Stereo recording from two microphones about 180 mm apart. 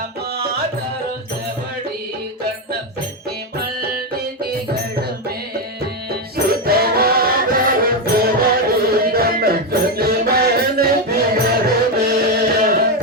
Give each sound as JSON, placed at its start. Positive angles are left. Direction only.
{"t": 5.8, "sound": "music", "side_deg": -60}